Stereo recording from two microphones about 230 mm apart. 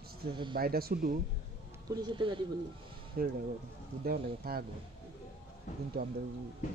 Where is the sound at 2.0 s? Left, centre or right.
Right.